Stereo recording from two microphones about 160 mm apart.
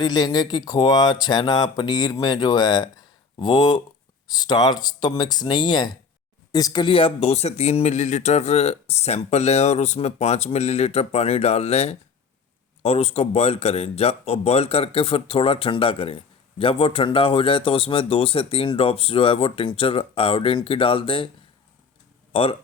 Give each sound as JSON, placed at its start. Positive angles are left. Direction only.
{"t": 0.0, "sound": "speech", "side_deg": 25}
{"t": 22.3, "sound": "speech", "side_deg": 35}